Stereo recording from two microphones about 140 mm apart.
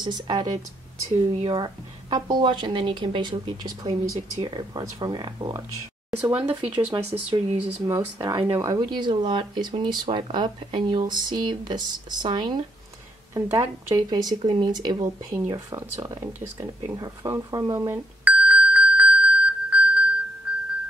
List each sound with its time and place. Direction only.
0.0 s speech: 30° right (ahead or behind)
6.0 s speech: 15° right (ahead or behind)
7.0 s speech: 50° right (ahead or behind)
7.8 s speech: 20° right (ahead or behind)
13.3 s speech: 20° right (ahead or behind)
14.4 s speech: 35° right (ahead or behind)
16.0 s a sound: 20° right (ahead or behind)
20.5 s music: 10° right (ahead or behind)